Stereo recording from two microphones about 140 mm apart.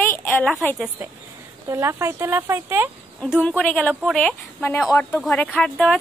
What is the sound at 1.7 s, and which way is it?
Speech, 20° right (ahead or behind).